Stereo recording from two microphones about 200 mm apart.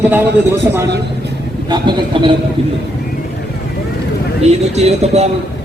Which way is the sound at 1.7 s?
25° right (ahead or behind).